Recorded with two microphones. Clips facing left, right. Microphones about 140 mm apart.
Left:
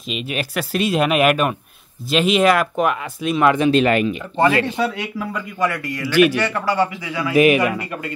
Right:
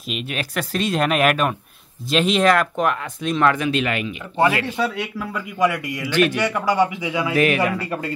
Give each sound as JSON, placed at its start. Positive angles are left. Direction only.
{"t": 0.1, "sound": "speech", "side_deg": 5}
{"t": 3.5, "sound": "speech", "side_deg": 30}
{"t": 4.7, "sound": "speech", "side_deg": 0}
{"t": 5.6, "sound": "speech", "side_deg": -15}
{"t": 7.3, "sound": "a man's voice", "side_deg": 15}